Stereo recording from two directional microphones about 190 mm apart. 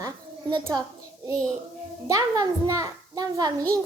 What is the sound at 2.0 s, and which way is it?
A child's voice, 15° right (ahead or behind).